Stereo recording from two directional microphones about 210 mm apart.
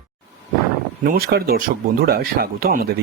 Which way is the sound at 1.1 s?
45° right (ahead or behind).